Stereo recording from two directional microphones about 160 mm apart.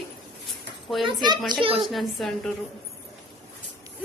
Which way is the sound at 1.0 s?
25° right (ahead or behind).